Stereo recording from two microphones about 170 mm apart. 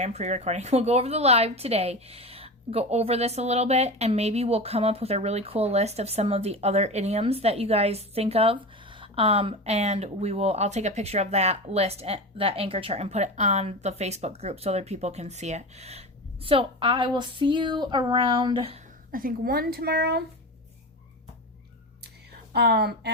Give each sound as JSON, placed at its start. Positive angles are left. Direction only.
{"t": 0.0, "sound": "speech", "side_deg": -40}
{"t": 19.1, "sound": "speech", "side_deg": -60}
{"t": 22.0, "sound": "a sound", "side_deg": -70}